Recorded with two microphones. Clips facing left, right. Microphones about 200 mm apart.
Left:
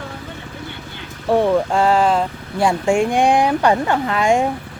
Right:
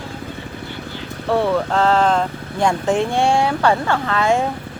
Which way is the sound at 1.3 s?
15° left (ahead or behind).